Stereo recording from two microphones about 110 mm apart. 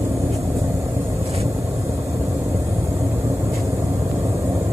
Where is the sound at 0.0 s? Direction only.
25° right (ahead or behind).